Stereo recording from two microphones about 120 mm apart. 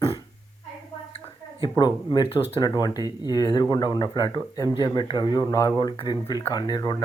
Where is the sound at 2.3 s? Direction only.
55° left (ahead or behind).